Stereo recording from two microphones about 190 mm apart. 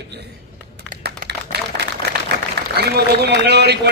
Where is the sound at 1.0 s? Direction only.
60° right (ahead or behind).